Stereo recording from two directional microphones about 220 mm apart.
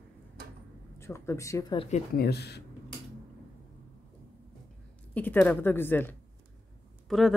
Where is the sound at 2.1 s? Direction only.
45° left (ahead or behind).